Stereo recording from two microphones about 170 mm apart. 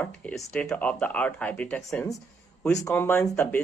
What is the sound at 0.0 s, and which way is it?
Speech, 10° left (ahead or behind).